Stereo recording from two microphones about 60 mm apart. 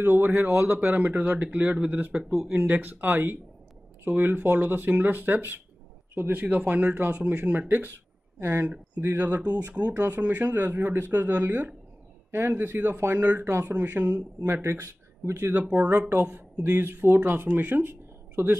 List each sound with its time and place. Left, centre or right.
0.0 s speech: right
8.6 s speech: right
13.5 s speech: right
13.8 s speech: right
14.4 s speech: right
15.6 s speech: right
16.7 s speech: right